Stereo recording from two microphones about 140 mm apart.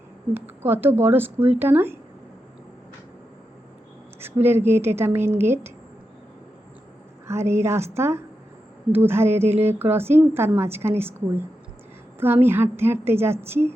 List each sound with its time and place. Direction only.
0.3 s a woman's voice: 15° right (ahead or behind)
4.2 s a sound: 15° right (ahead or behind)
4.7 s a woman's voice: 15° right (ahead or behind)
7.3 s a woman's voice: 20° right (ahead or behind)